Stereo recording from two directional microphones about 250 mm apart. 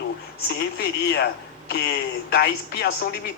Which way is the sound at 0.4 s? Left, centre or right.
Left.